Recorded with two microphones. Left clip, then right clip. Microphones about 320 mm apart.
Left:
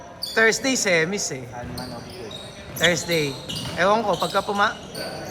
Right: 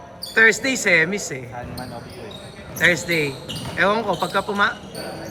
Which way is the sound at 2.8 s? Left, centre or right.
Centre.